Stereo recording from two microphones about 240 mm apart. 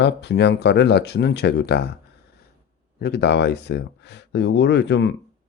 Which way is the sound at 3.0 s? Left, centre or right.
Left.